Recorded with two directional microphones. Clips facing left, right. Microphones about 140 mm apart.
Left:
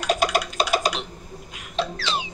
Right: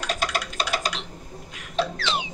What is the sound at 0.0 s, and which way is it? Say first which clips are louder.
Clock: left 6 dB; 15° left (ahead or behind).